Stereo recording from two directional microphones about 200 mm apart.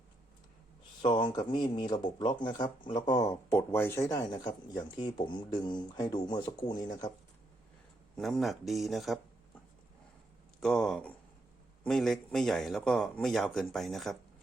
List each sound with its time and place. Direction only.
1.0 s speech: 25° left (ahead or behind)
8.1 s speech: centre (ahead or behind)
10.6 s speech: 5° left (ahead or behind)